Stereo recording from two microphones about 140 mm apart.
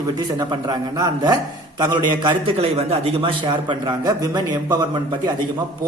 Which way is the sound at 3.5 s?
30° right (ahead or behind).